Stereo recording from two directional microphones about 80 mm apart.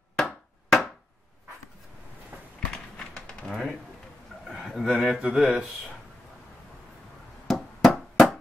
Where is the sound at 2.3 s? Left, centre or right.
Right.